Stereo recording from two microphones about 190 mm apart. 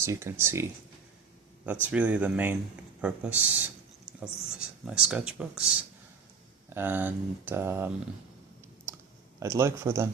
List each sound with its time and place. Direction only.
0.0 s speech: 15° right (ahead or behind)
9.4 s speech: 15° right (ahead or behind)